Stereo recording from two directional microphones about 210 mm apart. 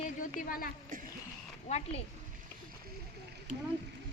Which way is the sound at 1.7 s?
30° left (ahead or behind).